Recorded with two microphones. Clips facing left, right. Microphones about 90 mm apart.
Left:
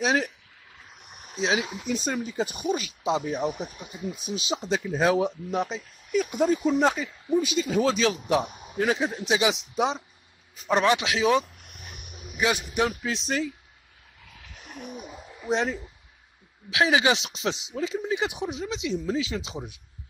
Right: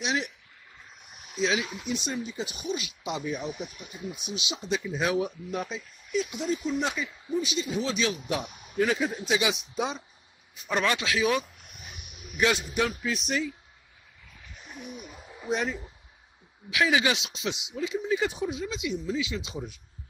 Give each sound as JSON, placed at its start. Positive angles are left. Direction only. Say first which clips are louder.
{"t": 0.0, "sound": "a man's voice", "louder": "left 5 dB", "side_deg": 40}
{"t": 1.0, "sound": "a sound", "louder": "left 3 dB", "side_deg": 55}
{"t": 1.3, "sound": "a man's voice", "louder": "left 1 dB", "side_deg": 30}
{"t": 3.5, "sound": "a man's voice", "louder": "left 3 dB", "side_deg": 35}
{"t": 6.1, "sound": "speech", "louder": "left 6 dB", "side_deg": 50}
{"t": 6.8, "sound": "a man's voice", "louder": "left 7 dB", "side_deg": 40}
{"t": 12.4, "sound": "a man's voice", "louder": "left 1 dB", "side_deg": 15}
{"t": 13.1, "sound": "a man's voice", "louder": "left 1 dB", "side_deg": 35}
{"t": 14.3, "sound": "a sound", "louder": "left 2 dB", "side_deg": 70}
{"t": 15.5, "sound": "a man's voice", "louder": "left 3 dB", "side_deg": 30}
{"t": 18.1, "sound": "speech", "louder": "even", "side_deg": 20}
{"t": 19.0, "sound": "a man's voice", "louder": "left 3 dB", "side_deg": 40}